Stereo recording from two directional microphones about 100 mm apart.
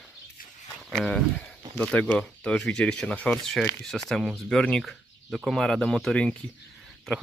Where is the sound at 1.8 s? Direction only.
15° left (ahead or behind).